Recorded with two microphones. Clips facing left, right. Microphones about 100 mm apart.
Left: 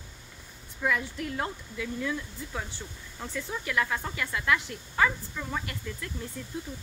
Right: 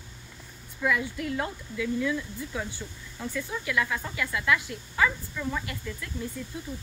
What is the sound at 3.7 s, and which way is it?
Speech, 40° left (ahead or behind).